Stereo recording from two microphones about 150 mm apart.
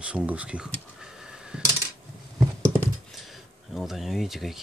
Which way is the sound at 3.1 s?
Centre (ahead or behind).